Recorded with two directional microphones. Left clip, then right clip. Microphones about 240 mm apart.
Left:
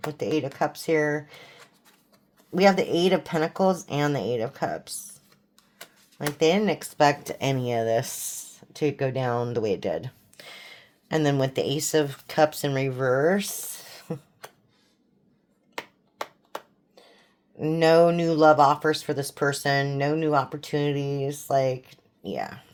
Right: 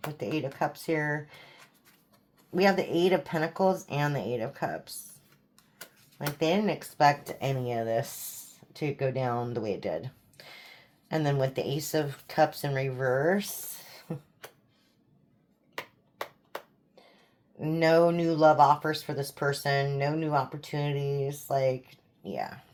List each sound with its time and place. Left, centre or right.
0.1 s speech: left
2.6 s speech: left
6.4 s speech: left
15.7 s finger snapping: left
17.6 s speech: left